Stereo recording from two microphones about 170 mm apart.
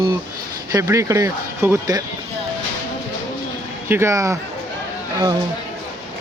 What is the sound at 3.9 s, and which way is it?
Speech, 15° right (ahead or behind).